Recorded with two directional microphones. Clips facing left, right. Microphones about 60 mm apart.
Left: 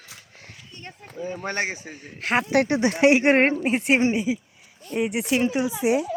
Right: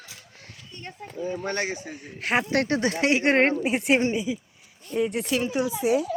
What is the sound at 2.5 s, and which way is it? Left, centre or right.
Speech, centre.